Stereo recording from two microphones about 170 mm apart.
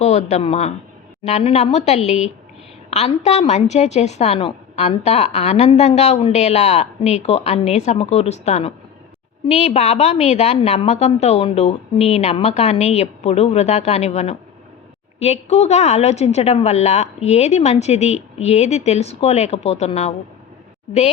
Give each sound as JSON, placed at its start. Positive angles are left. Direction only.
{"t": 0.0, "sound": "a woman's voice", "side_deg": 45}